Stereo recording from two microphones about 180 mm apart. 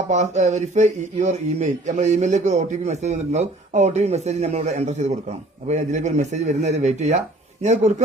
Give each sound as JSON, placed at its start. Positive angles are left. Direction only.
{"t": 0.1, "sound": "speech", "side_deg": -40}